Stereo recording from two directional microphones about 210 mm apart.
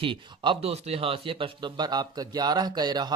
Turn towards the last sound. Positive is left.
turn(degrees=-20)  # may be behind; listen again after turning